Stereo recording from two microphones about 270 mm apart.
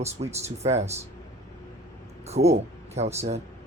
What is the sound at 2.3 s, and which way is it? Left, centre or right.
Speech, right.